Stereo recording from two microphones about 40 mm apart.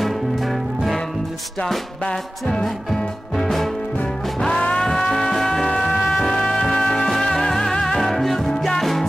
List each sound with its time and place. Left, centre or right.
0.0 s music: centre
2.0 s music: centre
2.6 s music: centre
4.5 s music: left
5.3 s music: centre